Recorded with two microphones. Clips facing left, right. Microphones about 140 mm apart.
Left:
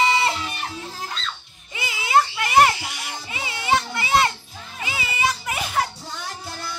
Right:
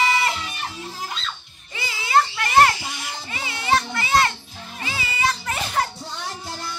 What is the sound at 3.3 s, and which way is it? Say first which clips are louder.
Children playing: even; 20° left (ahead or behind).